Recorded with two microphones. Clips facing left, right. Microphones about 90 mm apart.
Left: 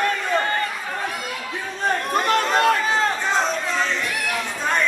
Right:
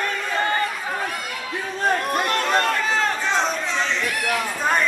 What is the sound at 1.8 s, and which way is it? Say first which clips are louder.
Chatter: even; 5° right (ahead or behind).